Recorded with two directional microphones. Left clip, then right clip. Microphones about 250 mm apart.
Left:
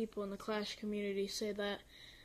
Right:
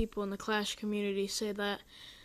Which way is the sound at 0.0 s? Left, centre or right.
Right.